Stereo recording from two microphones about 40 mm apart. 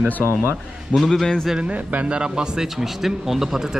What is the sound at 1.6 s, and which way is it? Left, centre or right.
Speech, right.